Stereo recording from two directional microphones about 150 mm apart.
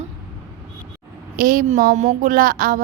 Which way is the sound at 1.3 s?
70° right (ahead or behind).